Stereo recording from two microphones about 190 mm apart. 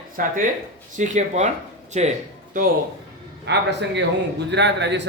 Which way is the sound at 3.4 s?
65° right (ahead or behind).